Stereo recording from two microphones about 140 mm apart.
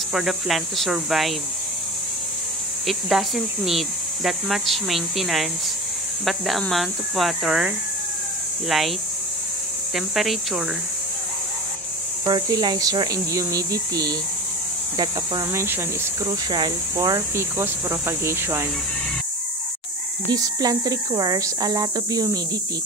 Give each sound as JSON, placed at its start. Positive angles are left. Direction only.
{"t": 0.1, "sound": "speech", "side_deg": 0}
{"t": 2.9, "sound": "speech", "side_deg": 0}
{"t": 9.9, "sound": "speech", "side_deg": 0}
{"t": 12.3, "sound": "speech", "side_deg": -30}
{"t": 15.6, "sound": "speech", "side_deg": -15}
{"t": 16.4, "sound": "speech", "side_deg": -30}
{"t": 20.2, "sound": "speech", "side_deg": -25}